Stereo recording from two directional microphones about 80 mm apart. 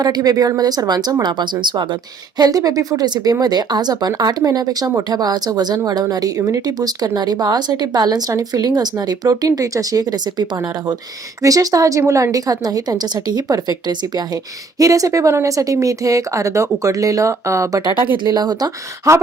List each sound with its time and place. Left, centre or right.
0.0 s a woman's voice: right
1.2 s speech: right
2.4 s a woman's voice: right
8.6 s speech: right
9.5 s a woman's voice: right
11.4 s a woman's voice: right
18.2 s speech: right
19.1 s speech: right